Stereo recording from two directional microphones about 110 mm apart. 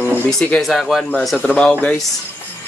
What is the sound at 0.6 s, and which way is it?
Speech, centre (ahead or behind).